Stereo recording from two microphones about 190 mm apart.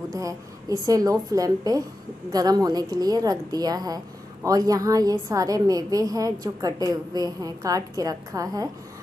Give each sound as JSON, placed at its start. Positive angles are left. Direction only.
{"t": 0.1, "sound": "a woman's voice", "side_deg": -20}